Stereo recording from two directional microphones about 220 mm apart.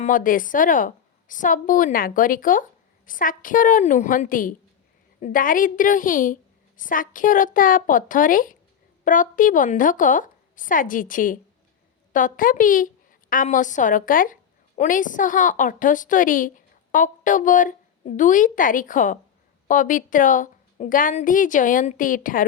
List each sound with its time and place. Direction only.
0.0 s a woman's voice: 40° left (ahead or behind)